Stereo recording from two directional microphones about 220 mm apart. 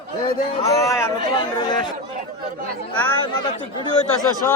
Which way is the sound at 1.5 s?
20° left (ahead or behind).